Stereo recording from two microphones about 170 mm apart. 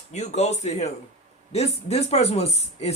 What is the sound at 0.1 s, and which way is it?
Speech, 40° left (ahead or behind).